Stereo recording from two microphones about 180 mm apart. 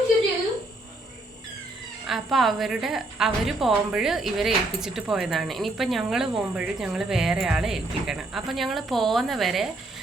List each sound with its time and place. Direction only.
2.0 s a woman's voice: centre (ahead or behind)